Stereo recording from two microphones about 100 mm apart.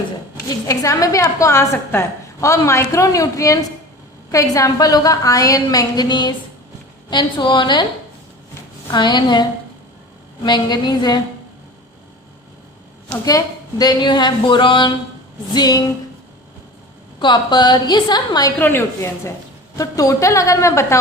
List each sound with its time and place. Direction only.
0.7 s a woman's voice: 35° left (ahead or behind); by 7.9 s 50° left (ahead or behind)
8.9 s a woman's voice: 50° left (ahead or behind)
13.2 s a woman's voice: 40° left (ahead or behind)
15.5 s a woman's voice: 45° left (ahead or behind)
17.2 s a woman's voice: 50° left (ahead or behind)
18.6 s a woman's voice: 20° left (ahead or behind)
19.7 s a woman's voice: 35° left (ahead or behind)